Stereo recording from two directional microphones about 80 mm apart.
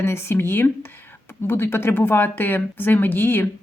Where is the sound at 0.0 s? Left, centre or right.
Left.